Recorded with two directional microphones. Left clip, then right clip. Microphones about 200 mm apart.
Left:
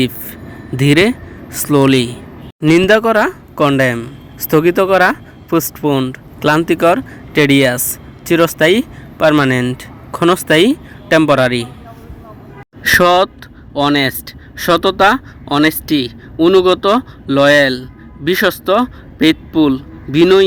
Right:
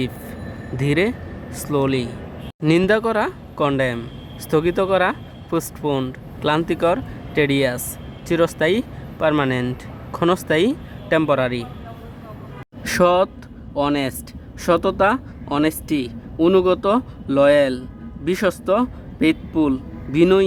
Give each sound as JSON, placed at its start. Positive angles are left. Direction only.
{"t": 0.8, "sound": "speech", "side_deg": 25}
{"t": 12.8, "sound": "a man's voice", "side_deg": 20}